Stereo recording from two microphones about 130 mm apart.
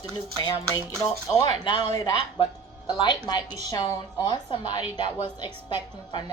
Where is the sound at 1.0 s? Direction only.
30° left (ahead or behind).